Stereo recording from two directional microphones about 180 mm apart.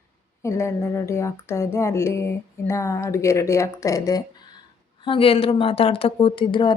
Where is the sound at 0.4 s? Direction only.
15° left (ahead or behind).